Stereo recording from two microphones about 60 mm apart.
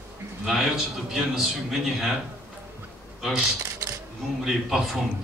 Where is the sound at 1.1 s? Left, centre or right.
Centre.